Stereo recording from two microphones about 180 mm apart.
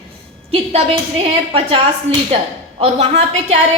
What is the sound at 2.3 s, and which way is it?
A woman's voice, 35° right (ahead or behind).